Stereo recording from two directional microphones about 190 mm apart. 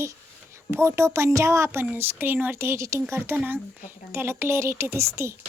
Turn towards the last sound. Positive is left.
turn(degrees=-15)  # may be behind; listen again after turning